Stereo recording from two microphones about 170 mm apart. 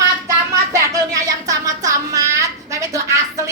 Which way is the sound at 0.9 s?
20° right (ahead or behind).